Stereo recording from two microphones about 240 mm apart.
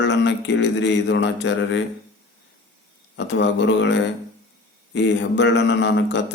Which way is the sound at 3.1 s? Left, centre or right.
Left.